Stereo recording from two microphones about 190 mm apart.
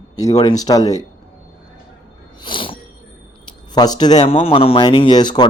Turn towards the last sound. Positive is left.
turn(degrees=20)  # may be behind; listen again after turning